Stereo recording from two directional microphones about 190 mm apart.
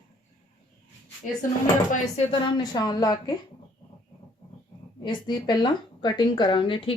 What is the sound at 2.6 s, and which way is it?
Speech, 20° left (ahead or behind).